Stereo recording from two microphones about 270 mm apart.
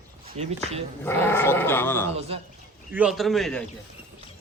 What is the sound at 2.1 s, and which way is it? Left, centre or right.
Speech, right.